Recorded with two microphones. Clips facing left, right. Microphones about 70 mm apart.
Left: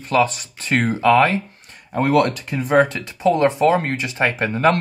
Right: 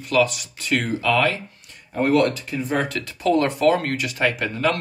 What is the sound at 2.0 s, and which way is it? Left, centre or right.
Speech, left.